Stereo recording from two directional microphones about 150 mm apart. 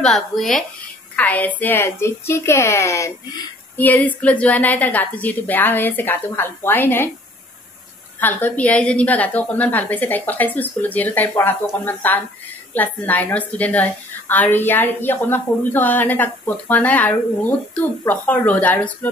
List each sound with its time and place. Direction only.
0.0 s a woman's voice: 5° left (ahead or behind)
8.2 s a woman's voice: 10° left (ahead or behind)